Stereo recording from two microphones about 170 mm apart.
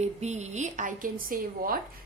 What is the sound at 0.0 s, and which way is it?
A woman's voice, 40° right (ahead or behind).